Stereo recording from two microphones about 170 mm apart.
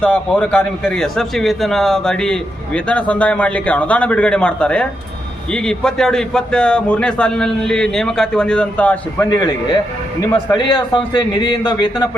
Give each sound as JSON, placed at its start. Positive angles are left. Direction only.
{"t": 0.0, "sound": "a man's voice", "side_deg": 5}
{"t": 10.2, "sound": "a man's voice", "side_deg": 25}